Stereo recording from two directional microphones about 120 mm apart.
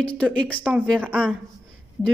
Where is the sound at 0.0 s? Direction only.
10° left (ahead or behind).